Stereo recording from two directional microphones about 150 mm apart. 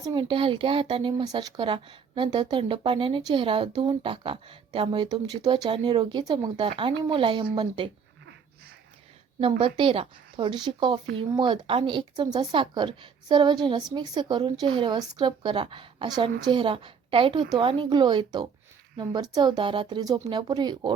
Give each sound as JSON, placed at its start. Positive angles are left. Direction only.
{"t": 0.1, "sound": "speech", "side_deg": -35}
{"t": 9.4, "sound": "speech", "side_deg": -35}